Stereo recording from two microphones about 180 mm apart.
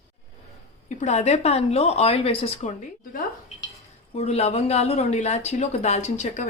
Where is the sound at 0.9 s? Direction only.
40° left (ahead or behind).